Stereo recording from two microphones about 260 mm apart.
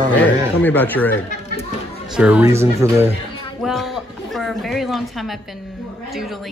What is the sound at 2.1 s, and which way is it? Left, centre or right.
A woman's voice, centre.